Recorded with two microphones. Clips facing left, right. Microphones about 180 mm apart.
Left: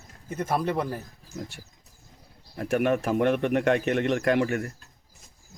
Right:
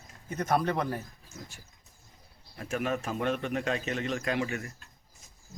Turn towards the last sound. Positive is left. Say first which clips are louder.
# left 8 dB
turn(degrees=60)  # may be behind; listen again after turning